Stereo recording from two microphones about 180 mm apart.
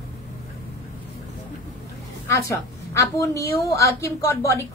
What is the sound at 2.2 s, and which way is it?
A woman's voice, 15° left (ahead or behind).